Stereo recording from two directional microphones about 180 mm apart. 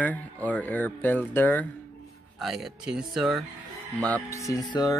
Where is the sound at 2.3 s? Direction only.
Centre (ahead or behind).